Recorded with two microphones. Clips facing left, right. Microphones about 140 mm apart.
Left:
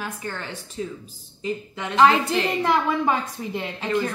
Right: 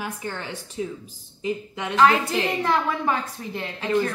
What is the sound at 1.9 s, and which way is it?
A woman's voice, 20° left (ahead or behind).